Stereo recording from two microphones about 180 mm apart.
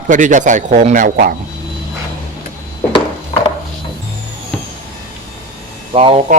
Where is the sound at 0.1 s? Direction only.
45° right (ahead or behind).